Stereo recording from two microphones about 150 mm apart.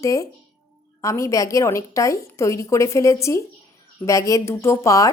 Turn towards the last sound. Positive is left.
turn(degrees=20)  # may be behind; listen again after turning